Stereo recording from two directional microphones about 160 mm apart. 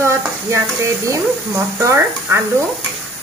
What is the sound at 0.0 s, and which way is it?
Speech, 15° right (ahead or behind).